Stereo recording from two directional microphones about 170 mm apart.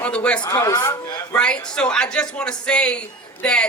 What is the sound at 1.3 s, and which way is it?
Speech, 5° left (ahead or behind).